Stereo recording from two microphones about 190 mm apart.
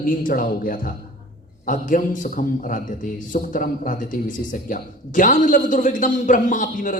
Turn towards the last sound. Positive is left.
turn(degrees=40)  # may be behind; listen again after turning